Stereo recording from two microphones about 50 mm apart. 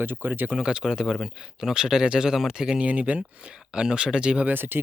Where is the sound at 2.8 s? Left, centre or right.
Right.